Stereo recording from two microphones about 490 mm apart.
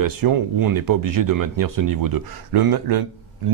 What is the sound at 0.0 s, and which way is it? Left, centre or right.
Speech, right.